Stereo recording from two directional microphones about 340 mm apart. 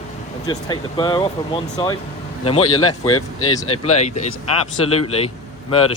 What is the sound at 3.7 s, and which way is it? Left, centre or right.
A man's voice, centre.